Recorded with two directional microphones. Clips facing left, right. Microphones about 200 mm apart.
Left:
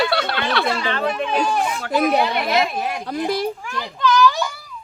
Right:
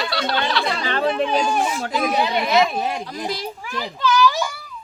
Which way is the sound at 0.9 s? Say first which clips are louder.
Right 2 dB; 30° right (ahead or behind).